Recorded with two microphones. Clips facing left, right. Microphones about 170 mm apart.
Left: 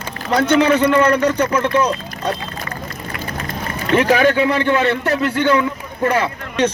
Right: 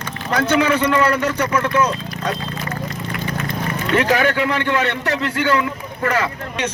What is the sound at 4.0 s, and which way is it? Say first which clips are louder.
Speech: left 4 dB; 15° left (ahead or behind).